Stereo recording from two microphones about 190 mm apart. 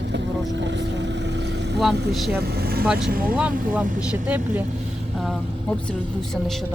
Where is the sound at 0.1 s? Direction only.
65° right (ahead or behind).